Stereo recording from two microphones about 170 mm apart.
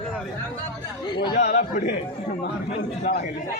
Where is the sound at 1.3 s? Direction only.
60° left (ahead or behind).